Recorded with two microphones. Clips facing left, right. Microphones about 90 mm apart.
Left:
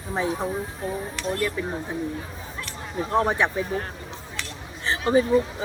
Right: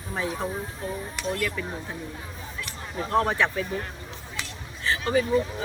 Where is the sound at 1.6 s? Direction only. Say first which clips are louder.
Left 4 dB; 15° left (ahead or behind).